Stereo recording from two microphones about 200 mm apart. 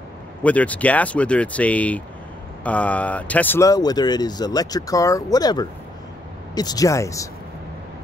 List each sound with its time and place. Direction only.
0.4 s speech: 5° left (ahead or behind)